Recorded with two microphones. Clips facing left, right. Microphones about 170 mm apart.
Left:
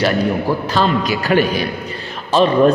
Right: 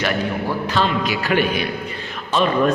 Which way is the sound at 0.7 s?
40° left (ahead or behind).